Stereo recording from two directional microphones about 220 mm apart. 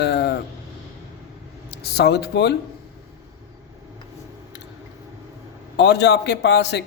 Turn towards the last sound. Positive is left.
turn(degrees=50)  # may be behind; listen again after turning